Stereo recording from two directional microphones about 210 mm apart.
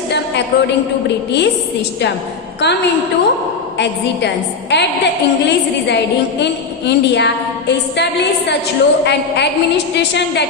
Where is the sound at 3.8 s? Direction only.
55° left (ahead or behind).